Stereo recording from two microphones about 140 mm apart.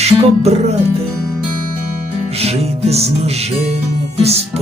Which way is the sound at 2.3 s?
45° right (ahead or behind).